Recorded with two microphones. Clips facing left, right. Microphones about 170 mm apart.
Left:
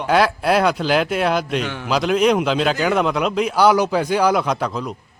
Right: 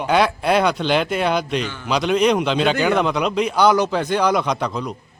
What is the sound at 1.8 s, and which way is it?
A man's voice, 5° left (ahead or behind).